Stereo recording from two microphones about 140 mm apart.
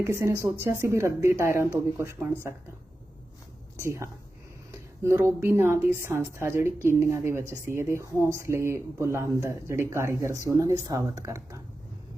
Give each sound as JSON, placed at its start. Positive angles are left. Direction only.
{"t": 0.0, "sound": "speech", "side_deg": -20}
{"t": 3.8, "sound": "a woman's voice", "side_deg": -20}